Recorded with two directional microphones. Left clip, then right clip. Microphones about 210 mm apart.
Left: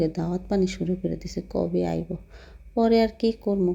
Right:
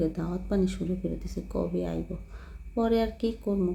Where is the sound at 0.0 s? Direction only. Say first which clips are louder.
Left 4 dB; 25° left (ahead or behind).